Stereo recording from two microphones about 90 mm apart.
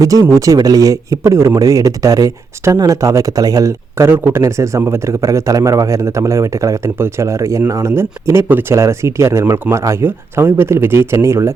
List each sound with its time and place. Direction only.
0.0 s a man's voice: 40° right (ahead or behind)